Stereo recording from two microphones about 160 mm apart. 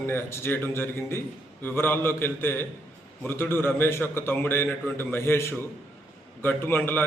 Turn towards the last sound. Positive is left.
turn(degrees=15)  # may be behind; listen again after turning